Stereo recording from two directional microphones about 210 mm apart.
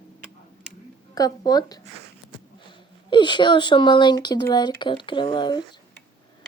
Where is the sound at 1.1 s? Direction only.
15° left (ahead or behind).